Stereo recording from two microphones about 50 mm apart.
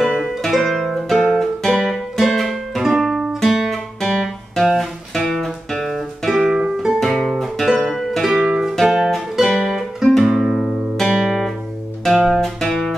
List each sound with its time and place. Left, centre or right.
0.0 s music: centre
3.4 s guitar: centre
4.7 s music: centre
6.5 s music: centre
6.9 s music: centre
8.3 s music: centre
11.2 s guitar: centre
12.4 s music: centre